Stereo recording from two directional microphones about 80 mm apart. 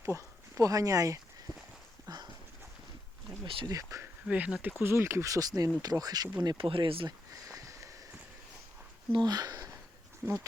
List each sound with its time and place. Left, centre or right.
0.0 s speech: right
2.0 s clip-clop: right
3.7 s speech: right
4.3 s speech: centre
4.8 s speech: right
6.4 s speech: right
7.4 s sniff: right
9.1 s speech: right
10.2 s speech: right